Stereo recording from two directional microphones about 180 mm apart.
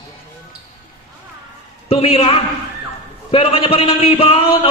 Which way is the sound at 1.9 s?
35° left (ahead or behind).